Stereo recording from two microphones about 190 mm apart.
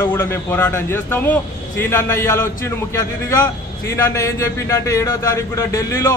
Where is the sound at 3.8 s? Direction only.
15° left (ahead or behind).